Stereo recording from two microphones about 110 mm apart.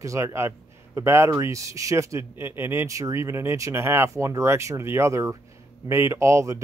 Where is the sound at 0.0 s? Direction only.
25° right (ahead or behind).